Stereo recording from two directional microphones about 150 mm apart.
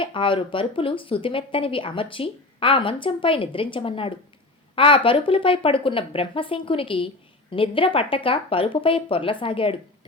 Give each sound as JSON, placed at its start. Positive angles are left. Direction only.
{"t": 0.0, "sound": "speech", "side_deg": 35}